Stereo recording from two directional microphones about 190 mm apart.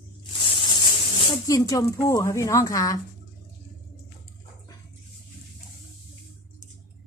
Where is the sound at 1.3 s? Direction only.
20° left (ahead or behind).